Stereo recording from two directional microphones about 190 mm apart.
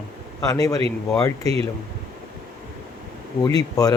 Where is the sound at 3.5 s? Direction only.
20° left (ahead or behind).